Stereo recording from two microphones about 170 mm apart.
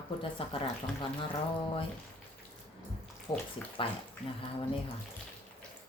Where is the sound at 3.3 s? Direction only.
20° left (ahead or behind).